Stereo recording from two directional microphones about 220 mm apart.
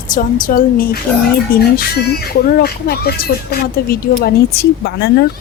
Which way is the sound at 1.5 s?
45° left (ahead or behind).